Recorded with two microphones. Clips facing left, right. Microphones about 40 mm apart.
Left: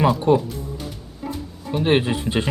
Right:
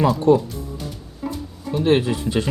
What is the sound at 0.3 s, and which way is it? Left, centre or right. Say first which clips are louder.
Speech: right 3 dB; left.